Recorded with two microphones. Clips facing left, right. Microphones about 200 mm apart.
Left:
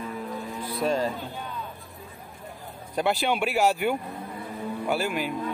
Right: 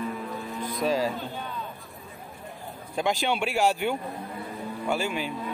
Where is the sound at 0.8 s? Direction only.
5° right (ahead or behind).